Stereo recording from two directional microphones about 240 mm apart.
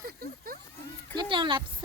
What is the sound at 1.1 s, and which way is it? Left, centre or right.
Speech, centre.